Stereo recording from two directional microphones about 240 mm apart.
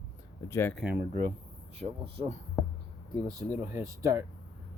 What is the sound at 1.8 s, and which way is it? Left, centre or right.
Speech, right.